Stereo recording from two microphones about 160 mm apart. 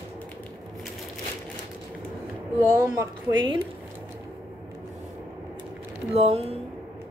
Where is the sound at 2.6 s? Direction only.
20° right (ahead or behind).